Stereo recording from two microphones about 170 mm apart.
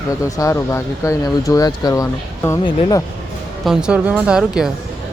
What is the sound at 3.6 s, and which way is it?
A woman's voice, 5° right (ahead or behind).